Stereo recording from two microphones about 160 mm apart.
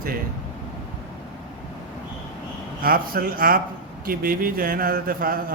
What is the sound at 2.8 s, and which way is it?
Speech, 65° right (ahead or behind).